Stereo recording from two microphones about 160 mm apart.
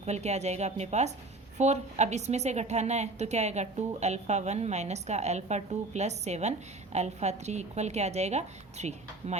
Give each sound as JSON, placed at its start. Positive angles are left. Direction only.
{"t": 0.0, "sound": "a woman's voice", "side_deg": -45}